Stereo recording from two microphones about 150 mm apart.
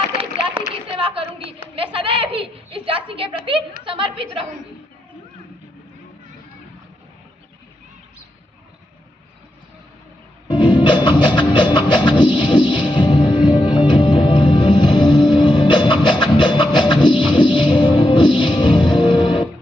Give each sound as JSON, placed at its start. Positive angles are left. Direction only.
{"t": 0.9, "sound": "a sound", "side_deg": -40}
{"t": 3.8, "sound": "a woman's voice", "side_deg": -35}
{"t": 10.5, "sound": "music", "side_deg": 30}